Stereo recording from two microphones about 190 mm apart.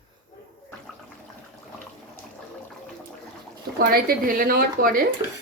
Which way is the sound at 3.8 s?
50° right (ahead or behind).